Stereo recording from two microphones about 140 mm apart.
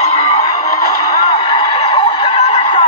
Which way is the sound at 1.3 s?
35° left (ahead or behind).